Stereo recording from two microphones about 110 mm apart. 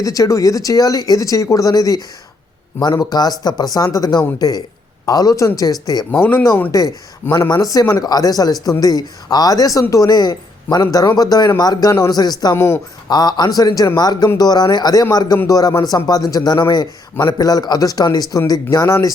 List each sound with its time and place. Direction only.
0.0 s a man's voice: 30° left (ahead or behind)
6.1 s speech: 15° left (ahead or behind)
6.7 s a man's voice: 35° left (ahead or behind)
12.5 s speech: 20° left (ahead or behind)
13.1 s a man's voice: 40° left (ahead or behind)